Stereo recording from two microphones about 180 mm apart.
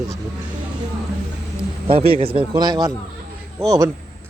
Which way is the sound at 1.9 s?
30° right (ahead or behind).